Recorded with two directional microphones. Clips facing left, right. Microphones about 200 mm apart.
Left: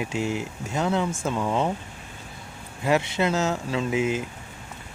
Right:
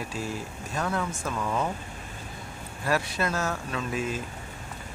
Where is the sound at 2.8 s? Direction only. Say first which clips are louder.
Left 5 dB; 20° left (ahead or behind).